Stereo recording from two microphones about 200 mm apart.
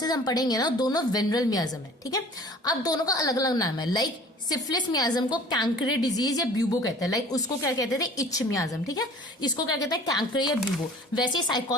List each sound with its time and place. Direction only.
0.0 s a woman's voice: 20° left (ahead or behind)